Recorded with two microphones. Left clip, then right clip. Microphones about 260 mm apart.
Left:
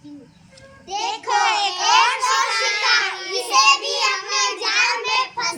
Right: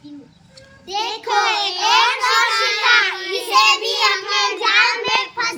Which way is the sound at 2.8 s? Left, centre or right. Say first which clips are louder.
Right 4 dB; centre.